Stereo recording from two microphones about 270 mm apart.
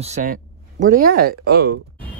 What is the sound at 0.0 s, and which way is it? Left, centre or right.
Speech, right.